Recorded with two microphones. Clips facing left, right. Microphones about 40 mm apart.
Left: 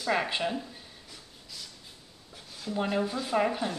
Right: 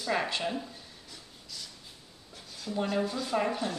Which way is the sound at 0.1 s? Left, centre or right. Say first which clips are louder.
Left 2 dB; centre.